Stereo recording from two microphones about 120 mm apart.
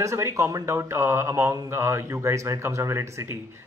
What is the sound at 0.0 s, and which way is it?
Speech, 25° right (ahead or behind).